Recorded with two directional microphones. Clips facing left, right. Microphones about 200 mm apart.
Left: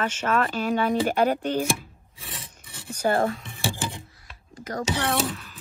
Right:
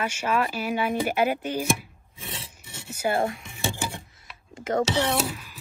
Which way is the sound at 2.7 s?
25° right (ahead or behind).